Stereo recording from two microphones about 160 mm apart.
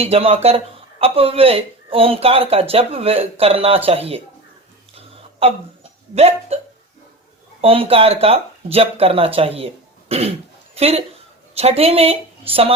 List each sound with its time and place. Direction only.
0.0 s speech: 40° right (ahead or behind)
4.9 s hiccup: 35° right (ahead or behind)
6.1 s speech: 40° right (ahead or behind)
7.6 s speech: 35° right (ahead or behind)
10.1 s cough: 40° right (ahead or behind)
10.8 s speech: 40° right (ahead or behind)